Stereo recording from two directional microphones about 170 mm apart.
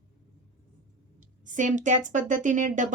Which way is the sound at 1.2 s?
50° right (ahead or behind).